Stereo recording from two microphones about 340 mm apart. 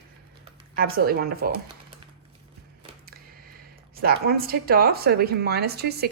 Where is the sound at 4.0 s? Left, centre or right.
Right.